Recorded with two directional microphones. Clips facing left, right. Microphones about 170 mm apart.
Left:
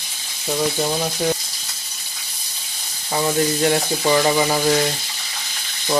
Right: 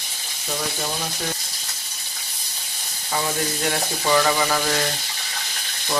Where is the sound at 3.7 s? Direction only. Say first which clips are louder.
Left 4 dB; 25° left (ahead or behind).